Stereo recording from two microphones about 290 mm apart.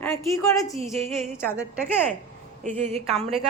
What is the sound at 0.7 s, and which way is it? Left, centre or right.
Speech, centre.